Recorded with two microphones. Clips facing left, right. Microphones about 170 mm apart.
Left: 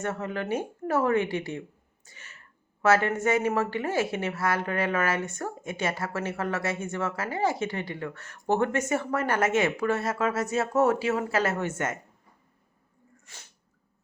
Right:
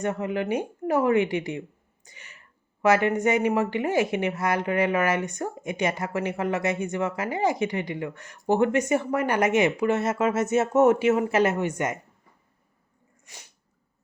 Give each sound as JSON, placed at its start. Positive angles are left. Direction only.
{"t": 0.0, "sound": "a woman's voice", "side_deg": -15}
{"t": 13.2, "sound": "sneeze", "side_deg": -15}